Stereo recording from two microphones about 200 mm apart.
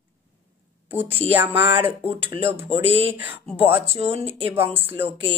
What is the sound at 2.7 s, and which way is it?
Speech, 30° right (ahead or behind).